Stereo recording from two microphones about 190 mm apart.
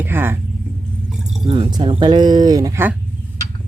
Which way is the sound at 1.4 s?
30° right (ahead or behind).